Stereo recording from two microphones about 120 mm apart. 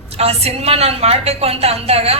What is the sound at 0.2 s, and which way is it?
A woman's voice, 60° right (ahead or behind).